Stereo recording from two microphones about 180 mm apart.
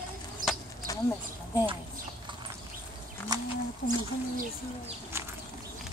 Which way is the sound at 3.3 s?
20° right (ahead or behind).